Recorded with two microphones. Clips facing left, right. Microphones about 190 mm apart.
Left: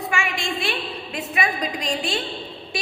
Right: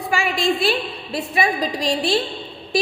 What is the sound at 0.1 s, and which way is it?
A woman's voice, 35° right (ahead or behind).